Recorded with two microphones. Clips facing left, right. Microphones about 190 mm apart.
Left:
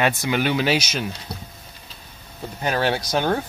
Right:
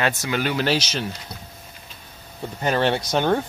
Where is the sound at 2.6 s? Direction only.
5° left (ahead or behind).